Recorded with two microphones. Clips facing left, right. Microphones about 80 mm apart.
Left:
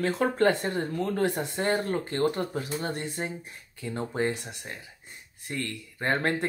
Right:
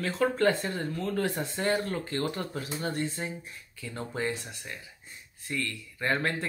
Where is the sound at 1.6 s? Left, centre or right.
Left.